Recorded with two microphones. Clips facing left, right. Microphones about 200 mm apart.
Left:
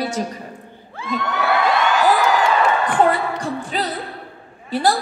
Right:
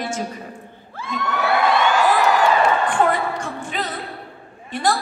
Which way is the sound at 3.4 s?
35° left (ahead or behind).